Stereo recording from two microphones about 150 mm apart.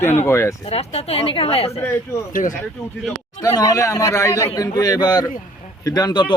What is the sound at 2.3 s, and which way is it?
Speech, 60° left (ahead or behind).